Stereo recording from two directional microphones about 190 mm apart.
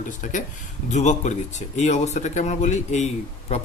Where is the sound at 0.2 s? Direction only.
40° left (ahead or behind).